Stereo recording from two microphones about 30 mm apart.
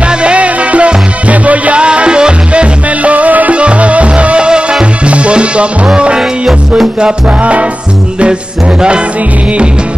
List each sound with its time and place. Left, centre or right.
0.0 s music: right
1.8 s music: right
3.5 s music: right
7.2 s music: right